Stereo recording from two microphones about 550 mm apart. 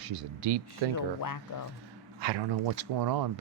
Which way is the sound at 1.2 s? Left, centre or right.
Left.